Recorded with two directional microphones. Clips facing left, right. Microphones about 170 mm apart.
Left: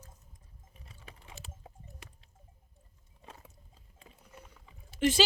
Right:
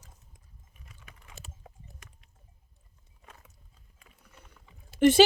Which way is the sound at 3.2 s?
30° left (ahead or behind).